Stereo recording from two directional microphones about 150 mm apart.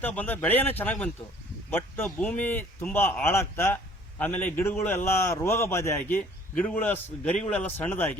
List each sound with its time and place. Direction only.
0.0 s a man's voice: 10° left (ahead or behind)